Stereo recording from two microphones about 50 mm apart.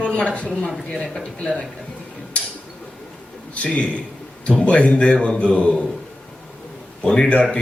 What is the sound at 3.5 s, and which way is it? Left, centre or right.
A woman's voice, left.